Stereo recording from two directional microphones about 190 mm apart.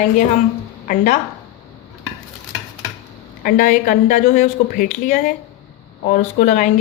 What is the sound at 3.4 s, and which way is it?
A woman's voice, 45° left (ahead or behind).